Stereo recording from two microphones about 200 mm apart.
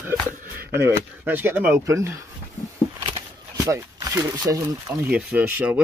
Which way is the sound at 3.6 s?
15° right (ahead or behind).